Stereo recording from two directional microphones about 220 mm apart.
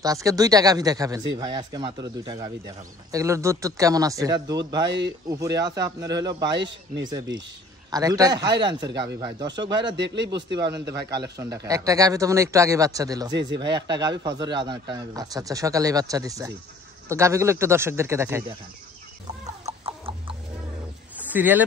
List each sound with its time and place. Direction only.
0.0 s a man's voice: 15° right (ahead or behind)
9.9 s speech: 55° right (ahead or behind)
10.7 s a man's voice: 15° right (ahead or behind)
13.3 s speech: 50° right (ahead or behind)
13.6 s a man's voice: 20° right (ahead or behind)
19.8 s chicken: 25° right (ahead or behind)
21.2 s speech: 10° right (ahead or behind)